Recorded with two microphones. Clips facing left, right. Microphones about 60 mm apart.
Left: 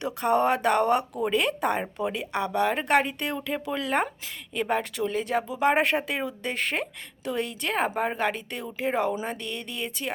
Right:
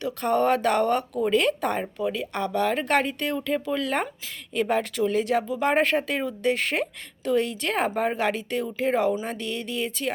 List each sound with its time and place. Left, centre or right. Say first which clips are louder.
0.2 s speech: right 1 dB; centre